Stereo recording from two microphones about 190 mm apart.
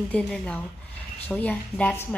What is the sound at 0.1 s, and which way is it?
A woman's voice, 5° left (ahead or behind).